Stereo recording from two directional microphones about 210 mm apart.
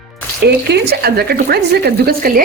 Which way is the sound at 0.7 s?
50° right (ahead or behind).